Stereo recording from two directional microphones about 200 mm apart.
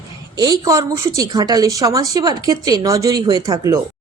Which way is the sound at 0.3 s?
20° right (ahead or behind).